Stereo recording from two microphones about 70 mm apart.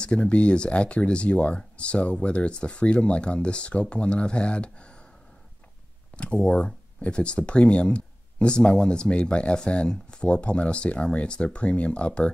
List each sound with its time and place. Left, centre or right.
0.0 s speech: centre
6.1 s speech: centre